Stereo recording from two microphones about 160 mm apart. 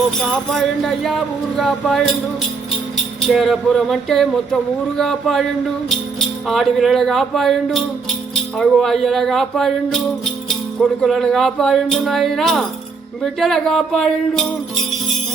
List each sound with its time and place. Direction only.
0.2 s speech: centre (ahead or behind)
3.2 s speech: centre (ahead or behind)